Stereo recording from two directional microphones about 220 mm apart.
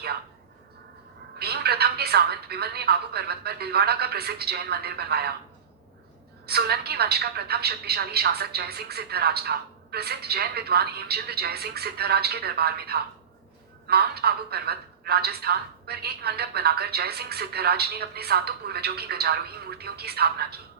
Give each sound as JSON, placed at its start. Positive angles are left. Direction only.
{"t": 1.4, "sound": "speech", "side_deg": -45}
{"t": 6.4, "sound": "speech", "side_deg": -45}